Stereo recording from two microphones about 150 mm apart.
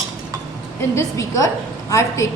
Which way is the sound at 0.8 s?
20° left (ahead or behind).